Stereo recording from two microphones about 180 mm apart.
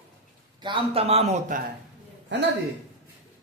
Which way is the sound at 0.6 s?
25° right (ahead or behind).